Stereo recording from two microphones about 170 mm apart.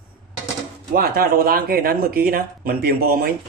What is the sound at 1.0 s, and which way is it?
A man's voice, 60° right (ahead or behind).